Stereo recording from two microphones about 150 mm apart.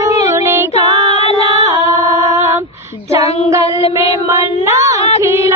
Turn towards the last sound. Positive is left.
turn(degrees=-20)  # may be behind; listen again after turning